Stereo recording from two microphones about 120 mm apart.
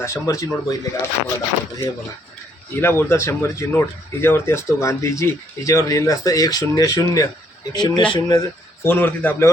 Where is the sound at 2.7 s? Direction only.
20° left (ahead or behind); by 8.4 s 40° left (ahead or behind).